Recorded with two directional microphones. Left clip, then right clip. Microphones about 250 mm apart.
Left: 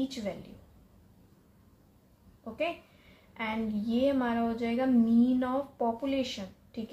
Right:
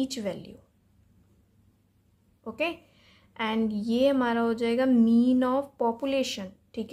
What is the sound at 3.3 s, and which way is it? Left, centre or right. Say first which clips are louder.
A woman's voice: right 5 dB; right.